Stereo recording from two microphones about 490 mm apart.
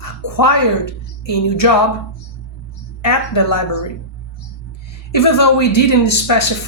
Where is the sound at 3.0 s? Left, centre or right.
Left.